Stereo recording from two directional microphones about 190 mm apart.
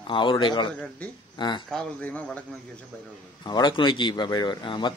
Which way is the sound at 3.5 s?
20° left (ahead or behind).